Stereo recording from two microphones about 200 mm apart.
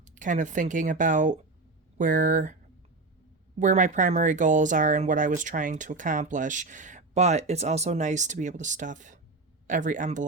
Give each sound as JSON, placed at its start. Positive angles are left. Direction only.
{"t": 0.0, "sound": "speech", "side_deg": -40}
{"t": 3.6, "sound": "speech", "side_deg": -40}